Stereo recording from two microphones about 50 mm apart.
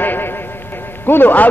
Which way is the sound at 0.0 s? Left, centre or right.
Left.